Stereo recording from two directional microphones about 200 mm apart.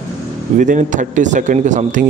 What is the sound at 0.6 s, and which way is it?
Speech, 40° right (ahead or behind).